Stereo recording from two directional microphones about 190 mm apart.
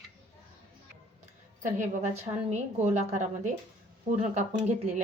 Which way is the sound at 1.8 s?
35° right (ahead or behind).